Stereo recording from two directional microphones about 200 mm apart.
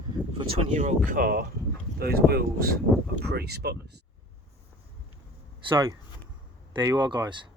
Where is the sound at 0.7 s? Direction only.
40° right (ahead or behind).